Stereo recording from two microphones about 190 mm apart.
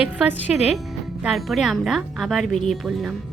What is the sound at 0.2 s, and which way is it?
A woman's voice, 5° right (ahead or behind).